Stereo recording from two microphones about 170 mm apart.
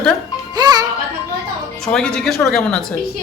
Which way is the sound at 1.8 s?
5° left (ahead or behind).